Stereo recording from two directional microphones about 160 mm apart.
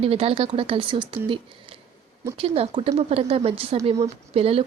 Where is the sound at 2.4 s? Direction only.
35° right (ahead or behind).